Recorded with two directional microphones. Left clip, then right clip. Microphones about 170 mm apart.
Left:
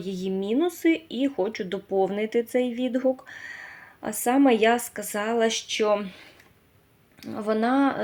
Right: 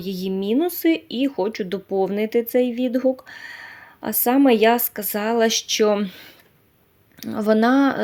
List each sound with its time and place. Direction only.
0.0 s speech: 35° right (ahead or behind)